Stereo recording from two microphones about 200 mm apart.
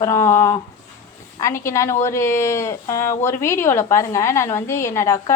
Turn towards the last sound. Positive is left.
turn(degrees=15)  # may be behind; listen again after turning